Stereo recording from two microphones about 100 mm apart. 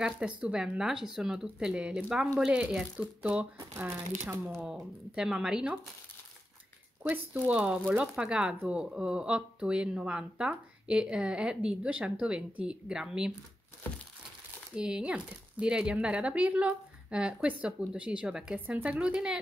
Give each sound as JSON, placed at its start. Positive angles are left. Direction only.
{"t": 0.4, "sound": "speech", "side_deg": -5}
{"t": 3.7, "sound": "speech", "side_deg": -20}
{"t": 4.6, "sound": "speech", "side_deg": -10}
{"t": 7.0, "sound": "speech", "side_deg": -15}
{"t": 14.8, "sound": "speech", "side_deg": -10}